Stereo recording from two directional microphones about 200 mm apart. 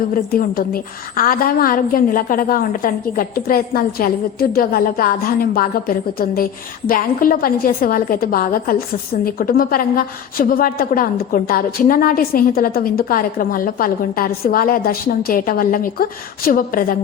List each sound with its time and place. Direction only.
0.1 s a woman's voice: 45° left (ahead or behind)